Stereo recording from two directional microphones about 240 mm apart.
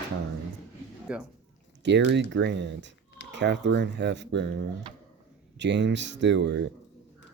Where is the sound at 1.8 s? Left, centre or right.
Right.